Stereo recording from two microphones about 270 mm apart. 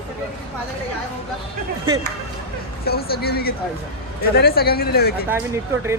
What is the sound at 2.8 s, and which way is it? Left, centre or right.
Speech, left.